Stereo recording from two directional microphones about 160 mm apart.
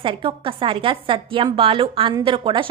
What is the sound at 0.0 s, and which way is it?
A woman's voice, 35° right (ahead or behind).